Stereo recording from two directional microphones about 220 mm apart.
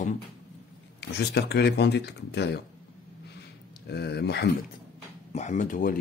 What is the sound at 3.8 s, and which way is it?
Speech, 45° left (ahead or behind).